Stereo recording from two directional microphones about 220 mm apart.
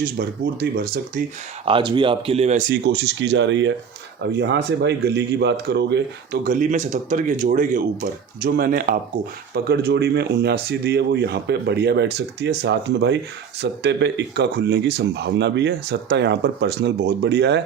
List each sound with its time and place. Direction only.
0.0 s speech: 45° right (ahead or behind)
1.6 s speech: 20° right (ahead or behind)
2.8 s speech: 50° right (ahead or behind)